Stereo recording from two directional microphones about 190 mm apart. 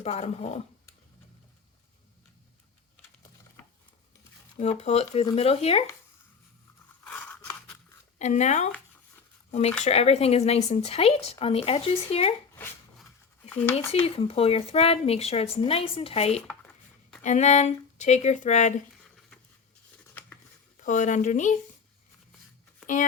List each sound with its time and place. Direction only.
0.0 s speech: 35° left (ahead or behind)
4.8 s speech: 35° left (ahead or behind)
7.0 s scissors: 10° left (ahead or behind)
8.2 s speech: 40° left (ahead or behind)
13.5 s speech: 10° left (ahead or behind)
13.7 s speech: 30° left (ahead or behind)
16.5 s a sound: 5° left (ahead or behind)
17.2 s speech: 40° left (ahead or behind)
19.0 s a sound: centre (ahead or behind)
20.7 s speech: 40° left (ahead or behind)